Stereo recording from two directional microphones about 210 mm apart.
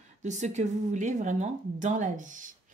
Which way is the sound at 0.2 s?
35° right (ahead or behind).